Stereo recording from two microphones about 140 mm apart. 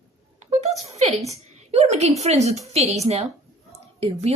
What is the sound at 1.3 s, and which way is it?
A woman's voice, 50° right (ahead or behind).